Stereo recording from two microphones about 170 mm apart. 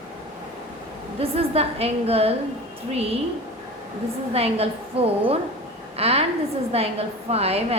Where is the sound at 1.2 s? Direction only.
35° right (ahead or behind).